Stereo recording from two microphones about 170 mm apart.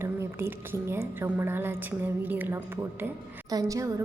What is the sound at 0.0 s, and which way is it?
A woman's voice, 15° right (ahead or behind).